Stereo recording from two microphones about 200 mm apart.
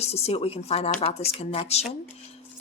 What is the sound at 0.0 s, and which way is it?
Speech, 30° left (ahead or behind).